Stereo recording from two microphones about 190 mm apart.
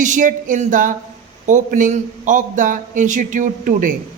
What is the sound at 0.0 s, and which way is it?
A man's voice, 40° right (ahead or behind).